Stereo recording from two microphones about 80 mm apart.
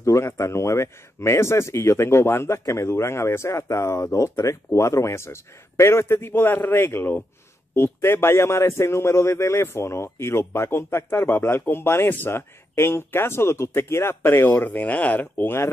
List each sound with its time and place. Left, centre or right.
0.0 s a man's voice: left